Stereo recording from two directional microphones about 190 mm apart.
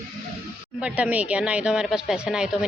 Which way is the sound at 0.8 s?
5° right (ahead or behind).